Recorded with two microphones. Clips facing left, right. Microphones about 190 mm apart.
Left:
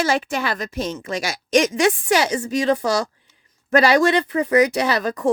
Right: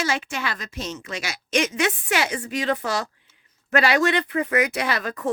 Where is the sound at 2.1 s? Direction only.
35° left (ahead or behind).